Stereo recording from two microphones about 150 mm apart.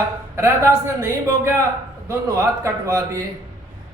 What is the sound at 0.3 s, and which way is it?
Speech, 20° right (ahead or behind).